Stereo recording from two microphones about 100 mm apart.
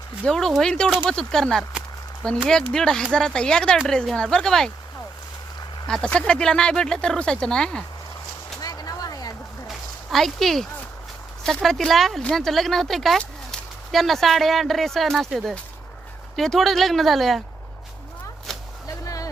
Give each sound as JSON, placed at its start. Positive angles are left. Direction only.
{"t": 0.3, "sound": "speech", "side_deg": 5}
{"t": 5.9, "sound": "speech", "side_deg": 10}
{"t": 8.6, "sound": "vehicle", "side_deg": 40}
{"t": 9.6, "sound": "a sound", "side_deg": 0}
{"t": 11.4, "sound": "speech", "side_deg": 5}
{"t": 19.0, "sound": "vehicle", "side_deg": 35}